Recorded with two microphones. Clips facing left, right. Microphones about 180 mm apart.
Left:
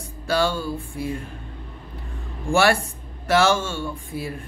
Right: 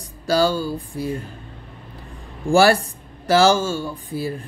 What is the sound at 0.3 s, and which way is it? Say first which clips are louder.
Mantra: right 4 dB; 35° right (ahead or behind).